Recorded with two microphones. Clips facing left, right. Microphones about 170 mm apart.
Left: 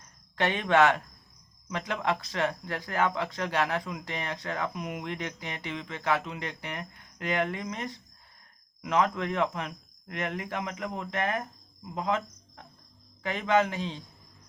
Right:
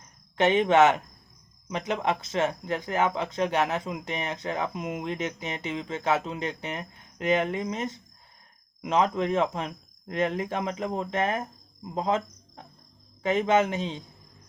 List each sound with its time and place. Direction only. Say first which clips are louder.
0.3 s speech: right 4 dB; 20° right (ahead or behind)